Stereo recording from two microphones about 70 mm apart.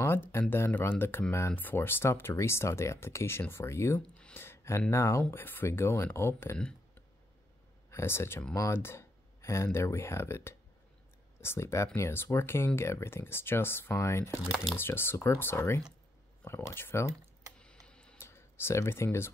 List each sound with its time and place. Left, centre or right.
0.0 s speech: left
4.3 s a sound: left
4.9 s speech: left
5.3 s speech: left
7.9 s speech: left
17.6 s typing: centre
18.1 s a sound: left